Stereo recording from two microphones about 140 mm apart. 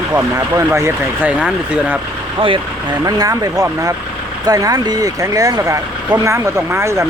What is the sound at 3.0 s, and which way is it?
Speech, 25° right (ahead or behind).